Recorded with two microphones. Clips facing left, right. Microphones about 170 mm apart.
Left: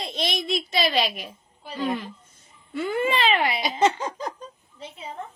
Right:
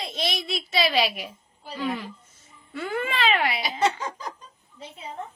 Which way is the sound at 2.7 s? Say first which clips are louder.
Left 5 dB; centre (ahead or behind).